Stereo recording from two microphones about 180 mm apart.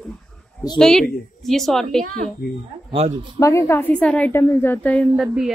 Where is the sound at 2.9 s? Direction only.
35° right (ahead or behind).